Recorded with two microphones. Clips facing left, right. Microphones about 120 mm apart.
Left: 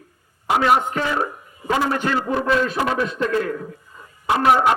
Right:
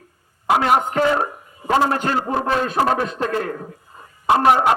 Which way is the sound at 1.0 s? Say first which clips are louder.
Right 4 dB; 35° right (ahead or behind).